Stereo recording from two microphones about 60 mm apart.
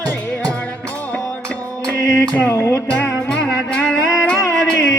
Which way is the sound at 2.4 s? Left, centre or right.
Left.